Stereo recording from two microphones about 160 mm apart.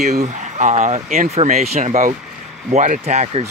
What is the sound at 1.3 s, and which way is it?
Speech, 40° right (ahead or behind).